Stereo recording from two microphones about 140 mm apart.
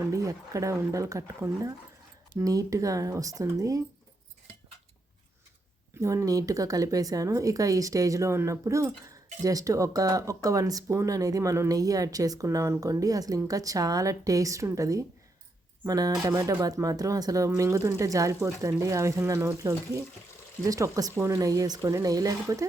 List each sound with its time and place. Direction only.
0.0 s speech: 20° right (ahead or behind)
6.0 s speech: 20° right (ahead or behind)